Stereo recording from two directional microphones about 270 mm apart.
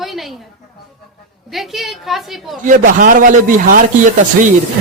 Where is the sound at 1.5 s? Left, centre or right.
Centre.